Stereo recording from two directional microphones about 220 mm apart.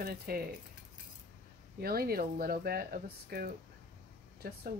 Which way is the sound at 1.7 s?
45° right (ahead or behind).